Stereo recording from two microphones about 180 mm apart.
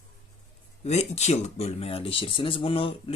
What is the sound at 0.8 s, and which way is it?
Speech, 40° left (ahead or behind).